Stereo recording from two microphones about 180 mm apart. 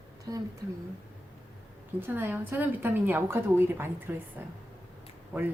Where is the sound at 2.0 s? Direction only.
10° right (ahead or behind).